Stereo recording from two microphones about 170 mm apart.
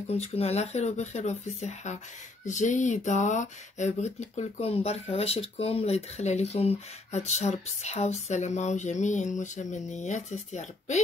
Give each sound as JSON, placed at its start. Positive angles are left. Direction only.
{"t": 0.1, "sound": "speech", "side_deg": 40}